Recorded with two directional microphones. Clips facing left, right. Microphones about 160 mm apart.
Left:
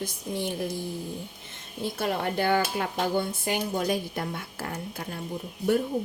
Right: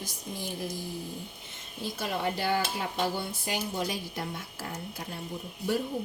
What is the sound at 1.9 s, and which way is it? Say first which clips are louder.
Speech: left 4 dB; 60° left (ahead or behind).